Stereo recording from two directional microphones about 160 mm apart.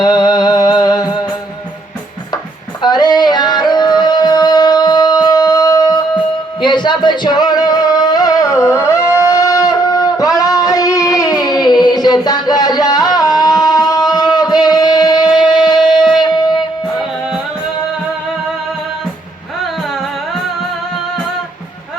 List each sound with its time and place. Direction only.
0.0 s music: 25° left (ahead or behind)
2.8 s yodeling: 25° left (ahead or behind)
6.6 s music: 30° left (ahead or behind)